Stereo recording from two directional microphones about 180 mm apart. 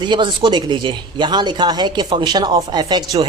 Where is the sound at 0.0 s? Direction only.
25° right (ahead or behind).